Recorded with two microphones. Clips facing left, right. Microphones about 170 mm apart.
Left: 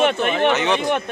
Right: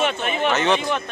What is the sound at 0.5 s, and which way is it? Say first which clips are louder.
Speech: even; 15° left (ahead or behind).